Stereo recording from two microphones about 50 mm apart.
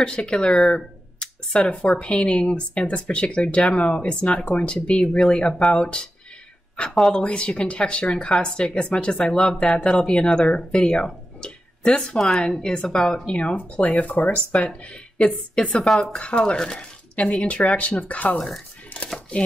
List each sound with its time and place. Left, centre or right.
0.0 s speech: centre
6.9 s speech: centre
7.2 s speech: left
11.1 s a sound: centre
12.2 s a woman's voice: centre
13.3 s speech: left
18.9 s chopping: left